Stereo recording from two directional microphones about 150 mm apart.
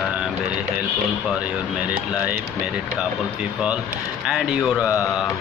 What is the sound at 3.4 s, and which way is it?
Speech, 5° right (ahead or behind).